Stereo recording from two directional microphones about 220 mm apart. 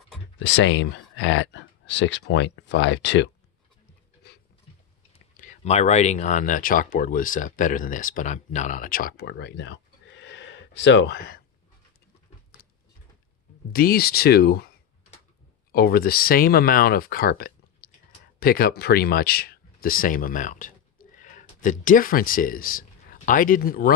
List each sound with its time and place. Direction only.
0.4 s speech: 55° left (ahead or behind)
4.2 s dog: 50° left (ahead or behind)
5.4 s speech: 30° left (ahead or behind)
9.1 s a sound: 50° left (ahead or behind)
13.7 s speech: 45° left (ahead or behind)